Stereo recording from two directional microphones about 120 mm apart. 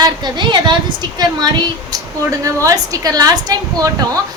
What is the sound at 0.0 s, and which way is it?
Speech, 40° right (ahead or behind).